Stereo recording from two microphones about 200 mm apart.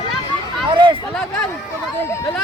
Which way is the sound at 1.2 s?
5° left (ahead or behind).